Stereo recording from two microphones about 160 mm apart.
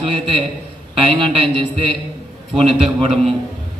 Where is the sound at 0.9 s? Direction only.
35° right (ahead or behind).